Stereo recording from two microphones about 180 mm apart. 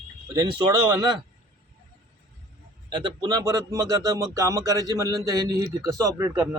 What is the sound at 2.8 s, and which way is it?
Speech, 25° right (ahead or behind).